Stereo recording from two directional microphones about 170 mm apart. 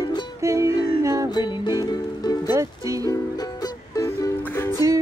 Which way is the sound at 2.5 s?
20° right (ahead or behind).